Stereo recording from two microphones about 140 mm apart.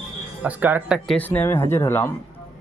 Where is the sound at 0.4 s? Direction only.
10° right (ahead or behind).